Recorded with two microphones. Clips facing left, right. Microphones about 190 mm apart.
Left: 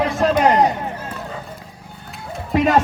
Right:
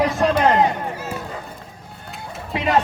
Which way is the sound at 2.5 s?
45° left (ahead or behind).